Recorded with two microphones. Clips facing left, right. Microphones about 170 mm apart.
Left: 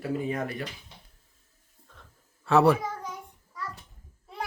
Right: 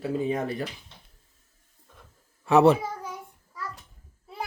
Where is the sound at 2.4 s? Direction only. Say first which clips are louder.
Right 3 dB; 20° right (ahead or behind).